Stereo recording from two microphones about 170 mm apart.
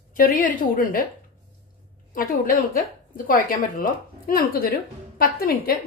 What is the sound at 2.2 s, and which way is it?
Speech, 55° left (ahead or behind).